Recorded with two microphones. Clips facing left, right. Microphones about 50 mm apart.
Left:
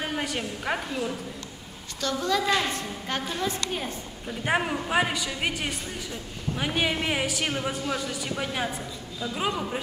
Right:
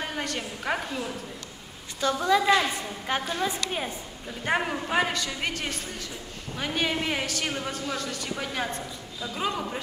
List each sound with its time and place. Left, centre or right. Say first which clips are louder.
0.0 s a woman's voice: left 2 dB; centre
2.0 s a woman's voice: right 3 dB; centre
4.3 s a man's voice: left 1 dB; centre